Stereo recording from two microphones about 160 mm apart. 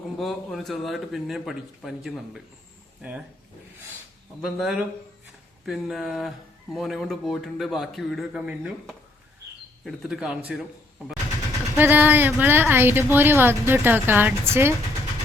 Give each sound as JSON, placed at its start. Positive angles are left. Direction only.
{"t": 0.2, "sound": "a man's voice", "side_deg": 0}
{"t": 4.4, "sound": "a man's voice", "side_deg": 0}
{"t": 11.8, "sound": "a woman's voice", "side_deg": -10}